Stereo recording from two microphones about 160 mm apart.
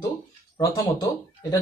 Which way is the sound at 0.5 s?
25° left (ahead or behind).